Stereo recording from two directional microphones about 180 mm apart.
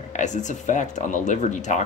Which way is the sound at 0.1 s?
40° left (ahead or behind).